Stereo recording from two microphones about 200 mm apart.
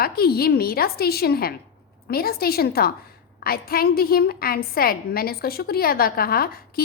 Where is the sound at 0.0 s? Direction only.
50° left (ahead or behind).